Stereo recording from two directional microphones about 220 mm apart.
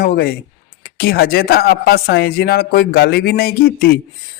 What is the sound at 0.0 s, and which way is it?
Speech, 45° left (ahead or behind).